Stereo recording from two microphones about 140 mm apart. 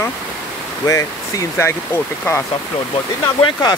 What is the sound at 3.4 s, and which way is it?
Speech, 30° left (ahead or behind).